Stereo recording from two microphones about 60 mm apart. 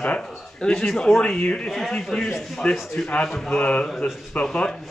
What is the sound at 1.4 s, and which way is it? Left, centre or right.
Speech, left.